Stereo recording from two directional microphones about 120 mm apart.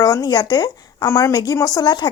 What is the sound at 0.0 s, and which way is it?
Speech, 30° left (ahead or behind).